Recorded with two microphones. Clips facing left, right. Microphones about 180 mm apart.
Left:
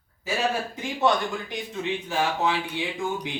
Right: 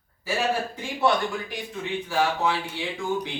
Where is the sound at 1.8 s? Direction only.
20° left (ahead or behind).